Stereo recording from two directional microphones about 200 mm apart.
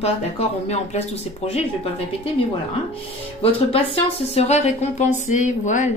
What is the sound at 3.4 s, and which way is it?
Speech, 30° left (ahead or behind).